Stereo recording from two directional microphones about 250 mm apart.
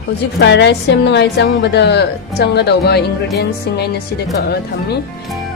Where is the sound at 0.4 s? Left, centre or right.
Left.